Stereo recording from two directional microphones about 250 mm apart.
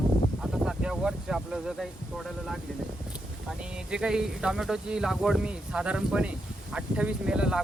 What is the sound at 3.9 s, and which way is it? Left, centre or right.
Speech, centre.